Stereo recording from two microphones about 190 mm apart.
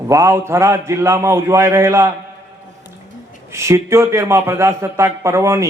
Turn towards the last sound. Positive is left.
turn(degrees=-15)  # may be behind; listen again after turning